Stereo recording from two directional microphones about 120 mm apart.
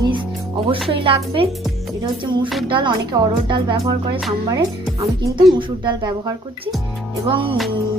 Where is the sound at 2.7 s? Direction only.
40° right (ahead or behind).